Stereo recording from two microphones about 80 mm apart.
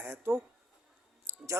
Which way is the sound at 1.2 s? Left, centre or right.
Right.